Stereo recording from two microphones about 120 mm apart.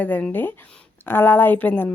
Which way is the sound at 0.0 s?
15° left (ahead or behind).